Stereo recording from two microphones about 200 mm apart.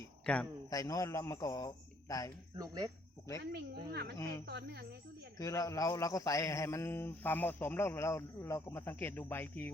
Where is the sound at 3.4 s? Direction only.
55° right (ahead or behind).